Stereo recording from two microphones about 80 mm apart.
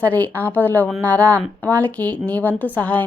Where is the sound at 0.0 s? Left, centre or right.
Left.